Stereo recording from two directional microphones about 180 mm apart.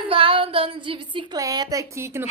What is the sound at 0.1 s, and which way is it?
Speech, 30° right (ahead or behind).